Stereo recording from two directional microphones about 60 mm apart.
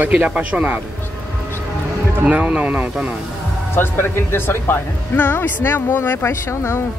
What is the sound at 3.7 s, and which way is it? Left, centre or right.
A woman's voice, left.